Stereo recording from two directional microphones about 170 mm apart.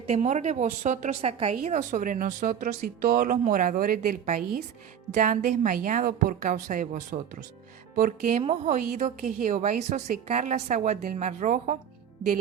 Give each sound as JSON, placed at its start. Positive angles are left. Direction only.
{"t": 0.0, "sound": "a woman's voice", "side_deg": -40}
{"t": 1.6, "sound": "a woman's voice", "side_deg": -45}